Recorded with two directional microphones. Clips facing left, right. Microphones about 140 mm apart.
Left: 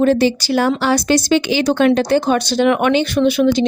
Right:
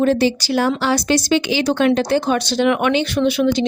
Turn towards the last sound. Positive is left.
turn(degrees=45)  # may be behind; listen again after turning